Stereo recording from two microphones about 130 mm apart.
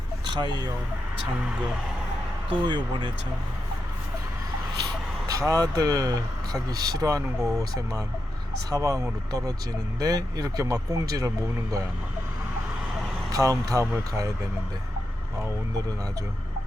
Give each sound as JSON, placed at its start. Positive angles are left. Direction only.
{"t": 0.3, "sound": "speech", "side_deg": -35}
{"t": 2.5, "sound": "speech", "side_deg": -35}
{"t": 5.3, "sound": "speech", "side_deg": -25}
{"t": 13.3, "sound": "speech", "side_deg": -25}